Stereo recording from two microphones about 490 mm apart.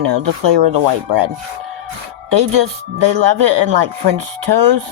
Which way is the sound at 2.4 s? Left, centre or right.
Right.